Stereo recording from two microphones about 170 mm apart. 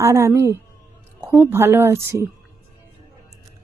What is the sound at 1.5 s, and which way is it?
Speech, 15° right (ahead or behind).